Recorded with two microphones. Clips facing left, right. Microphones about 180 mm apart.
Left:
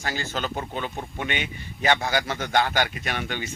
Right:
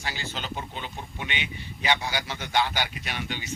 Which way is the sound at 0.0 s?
45° left (ahead or behind).